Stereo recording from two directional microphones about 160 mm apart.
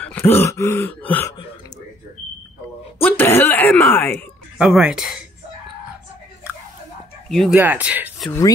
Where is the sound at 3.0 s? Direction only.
15° left (ahead or behind).